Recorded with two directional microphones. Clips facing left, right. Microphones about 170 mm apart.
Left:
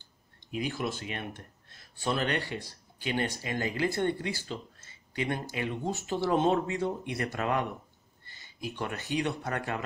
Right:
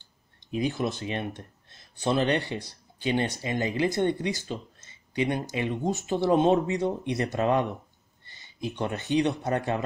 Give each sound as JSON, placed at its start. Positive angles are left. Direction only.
{"t": 0.5, "sound": "speech", "side_deg": -20}